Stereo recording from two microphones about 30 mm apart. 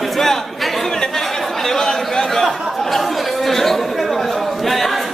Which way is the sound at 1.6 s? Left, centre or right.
Left.